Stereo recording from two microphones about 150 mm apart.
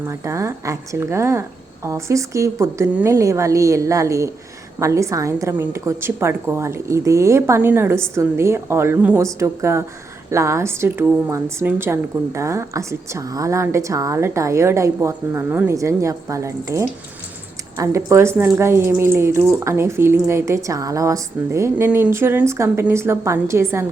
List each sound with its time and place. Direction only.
0.0 s a woman's voice: 20° right (ahead or behind)